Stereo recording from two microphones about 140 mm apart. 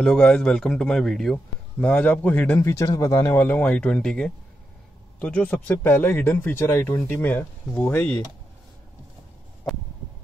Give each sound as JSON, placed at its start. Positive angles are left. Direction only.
{"t": 0.0, "sound": "a man's voice", "side_deg": 5}